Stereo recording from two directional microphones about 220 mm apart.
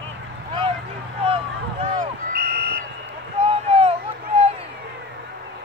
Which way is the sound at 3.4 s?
25° right (ahead or behind).